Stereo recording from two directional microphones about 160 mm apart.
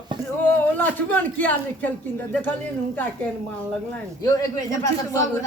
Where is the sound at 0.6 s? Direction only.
10° left (ahead or behind).